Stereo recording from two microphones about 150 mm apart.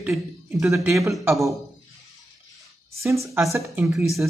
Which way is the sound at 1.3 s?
Centre (ahead or behind).